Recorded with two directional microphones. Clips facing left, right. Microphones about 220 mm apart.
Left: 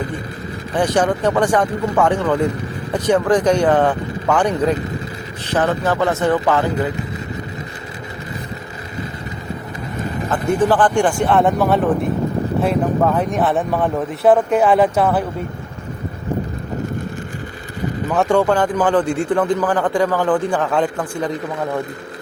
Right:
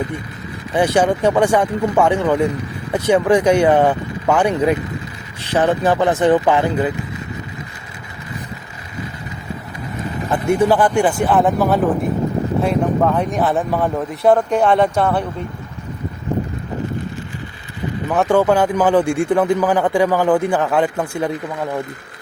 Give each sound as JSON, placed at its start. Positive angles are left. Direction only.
{"t": 0.7, "sound": "a man's voice", "side_deg": -10}
{"t": 10.2, "sound": "a man's voice", "side_deg": -10}
{"t": 18.1, "sound": "a man's voice", "side_deg": -5}